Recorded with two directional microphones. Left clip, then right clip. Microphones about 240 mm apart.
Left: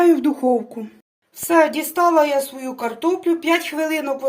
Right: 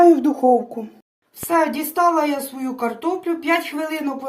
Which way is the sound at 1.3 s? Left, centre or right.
Left.